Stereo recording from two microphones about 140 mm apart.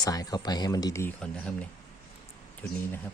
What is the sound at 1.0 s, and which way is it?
Speech, 5° left (ahead or behind).